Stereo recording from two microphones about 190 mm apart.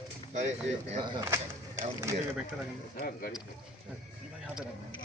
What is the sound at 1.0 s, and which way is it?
Speech, 20° right (ahead or behind).